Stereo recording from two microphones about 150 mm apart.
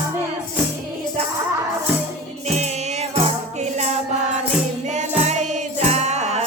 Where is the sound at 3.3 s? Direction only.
50° right (ahead or behind).